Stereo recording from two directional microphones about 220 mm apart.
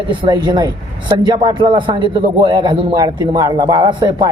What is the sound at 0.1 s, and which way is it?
A man's voice, 20° right (ahead or behind).